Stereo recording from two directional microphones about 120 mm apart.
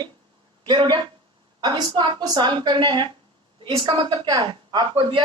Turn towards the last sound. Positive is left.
turn(degrees=-40)  # may be behind; listen again after turning